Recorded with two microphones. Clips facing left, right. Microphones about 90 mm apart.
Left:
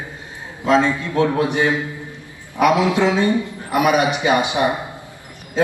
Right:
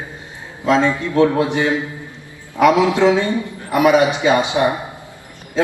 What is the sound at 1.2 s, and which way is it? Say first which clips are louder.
Speech: right 3 dB; 20° right (ahead or behind).